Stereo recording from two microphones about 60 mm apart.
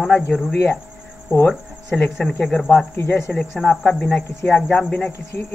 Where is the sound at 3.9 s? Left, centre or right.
Centre.